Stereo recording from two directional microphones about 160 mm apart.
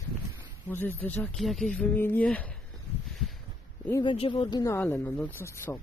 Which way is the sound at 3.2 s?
Centre (ahead or behind).